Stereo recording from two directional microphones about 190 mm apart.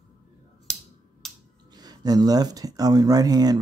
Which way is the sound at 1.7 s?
20° right (ahead or behind).